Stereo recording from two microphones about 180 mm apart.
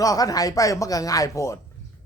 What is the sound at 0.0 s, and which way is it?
Speech, 20° left (ahead or behind).